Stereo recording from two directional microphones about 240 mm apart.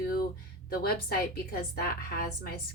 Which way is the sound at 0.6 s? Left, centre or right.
Left.